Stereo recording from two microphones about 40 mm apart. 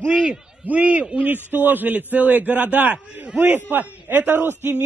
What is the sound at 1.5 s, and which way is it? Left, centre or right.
A man's voice, right.